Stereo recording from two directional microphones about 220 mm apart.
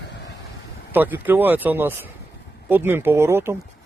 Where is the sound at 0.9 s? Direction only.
10° right (ahead or behind).